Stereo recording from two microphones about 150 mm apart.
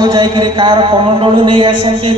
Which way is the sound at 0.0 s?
30° right (ahead or behind).